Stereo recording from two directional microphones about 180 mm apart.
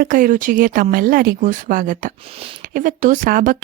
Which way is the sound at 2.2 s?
30° right (ahead or behind).